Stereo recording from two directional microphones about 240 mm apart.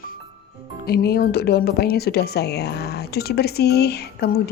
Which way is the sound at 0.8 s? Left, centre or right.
Left.